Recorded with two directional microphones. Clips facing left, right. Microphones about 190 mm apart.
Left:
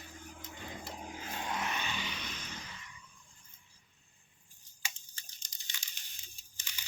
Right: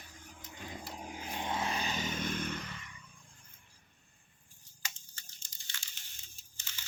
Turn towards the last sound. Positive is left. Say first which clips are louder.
# even
turn(degrees=15)  # may be behind; listen again after turning